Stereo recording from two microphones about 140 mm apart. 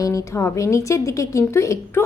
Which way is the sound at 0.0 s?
25° left (ahead or behind).